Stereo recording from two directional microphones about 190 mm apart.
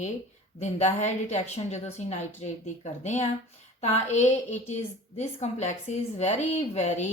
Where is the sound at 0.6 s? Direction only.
35° left (ahead or behind).